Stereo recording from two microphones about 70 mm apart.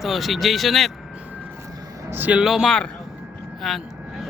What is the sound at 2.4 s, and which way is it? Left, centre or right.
Speech, centre.